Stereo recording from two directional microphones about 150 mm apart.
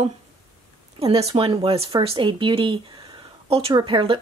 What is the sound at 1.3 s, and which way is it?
Speech, 35° right (ahead or behind).